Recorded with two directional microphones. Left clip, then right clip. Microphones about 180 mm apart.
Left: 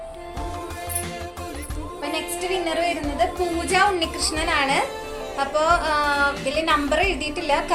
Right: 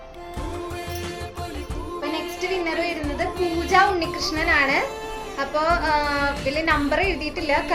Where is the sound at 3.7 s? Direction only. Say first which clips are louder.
Right 2 dB; 10° right (ahead or behind).